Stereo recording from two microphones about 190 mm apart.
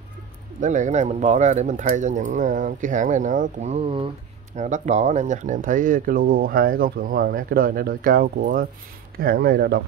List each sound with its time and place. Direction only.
0.6 s speech: 40° right (ahead or behind); by 9.8 s 55° right (ahead or behind)